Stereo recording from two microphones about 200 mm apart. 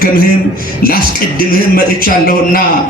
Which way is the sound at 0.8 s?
45° left (ahead or behind).